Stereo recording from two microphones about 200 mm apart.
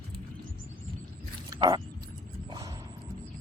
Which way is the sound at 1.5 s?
25° right (ahead or behind).